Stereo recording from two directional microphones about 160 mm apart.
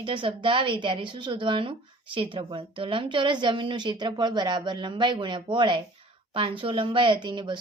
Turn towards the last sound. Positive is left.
turn(degrees=-30)  # may be behind; listen again after turning